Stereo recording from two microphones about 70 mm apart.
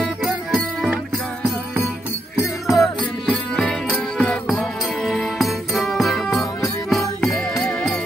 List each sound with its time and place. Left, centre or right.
0.0 s music: centre
2.3 s music: centre
3.0 s music: centre
4.6 s music: centre